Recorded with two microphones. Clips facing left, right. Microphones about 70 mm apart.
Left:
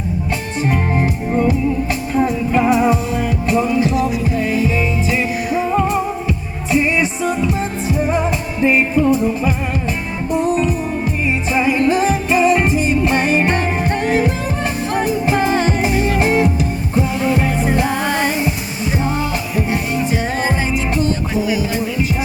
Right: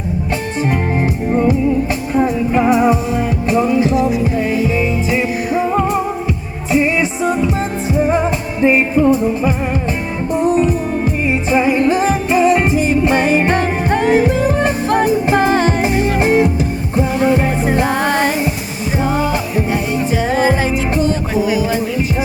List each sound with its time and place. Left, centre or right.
1.4 s music: right
6.7 s music: right
13.5 s music: right
15.4 s music: right
16.0 s music: right
17.8 s music: right
20.4 s music: right